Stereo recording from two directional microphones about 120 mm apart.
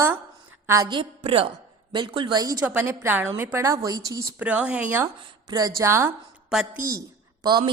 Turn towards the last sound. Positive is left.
turn(degrees=-35)  # may be behind; listen again after turning